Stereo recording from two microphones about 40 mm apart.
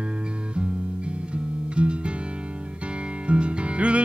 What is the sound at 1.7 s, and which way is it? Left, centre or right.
Music, right.